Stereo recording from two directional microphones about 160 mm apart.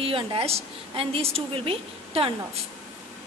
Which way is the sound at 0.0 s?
35° right (ahead or behind).